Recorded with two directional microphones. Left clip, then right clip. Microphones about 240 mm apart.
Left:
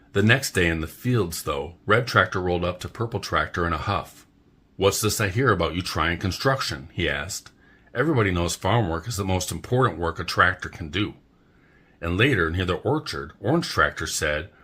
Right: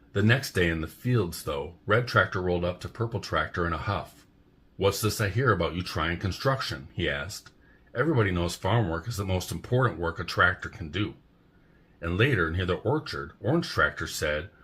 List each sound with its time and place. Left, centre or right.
0.1 s speech: left